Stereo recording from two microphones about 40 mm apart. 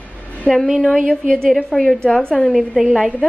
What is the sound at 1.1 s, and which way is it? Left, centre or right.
A woman's voice, centre.